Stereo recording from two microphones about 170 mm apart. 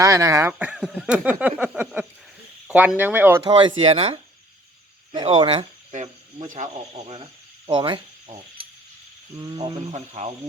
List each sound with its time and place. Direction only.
0.0 s speech: 20° right (ahead or behind)
2.6 s a sound: 10° right (ahead or behind)
3.0 s speech: 10° right (ahead or behind)
3.4 s speech: 30° right (ahead or behind)
7.7 s speech: 30° right (ahead or behind)